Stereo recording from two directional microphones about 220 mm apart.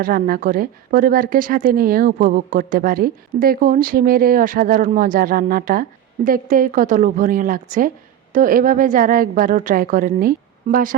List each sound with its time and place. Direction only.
0.0 s a woman's voice: 40° right (ahead or behind)